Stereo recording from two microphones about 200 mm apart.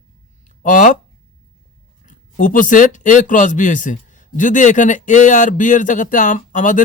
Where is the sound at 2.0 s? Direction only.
40° left (ahead or behind).